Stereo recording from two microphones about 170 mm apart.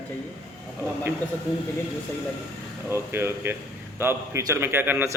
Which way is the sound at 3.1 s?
15° right (ahead or behind).